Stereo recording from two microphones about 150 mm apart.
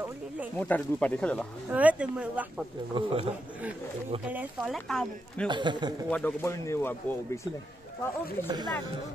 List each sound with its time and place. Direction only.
0.6 s speech: 10° left (ahead or behind)
1.7 s speech: 10° right (ahead or behind)
2.9 s a man's voice: 40° right (ahead or behind)
4.3 s speech: 10° right (ahead or behind)
4.7 s speech: 5° left (ahead or behind)
5.5 s a man's voice: 30° right (ahead or behind)
6.0 s speech: 10° left (ahead or behind)
8.5 s speech: 25° right (ahead or behind)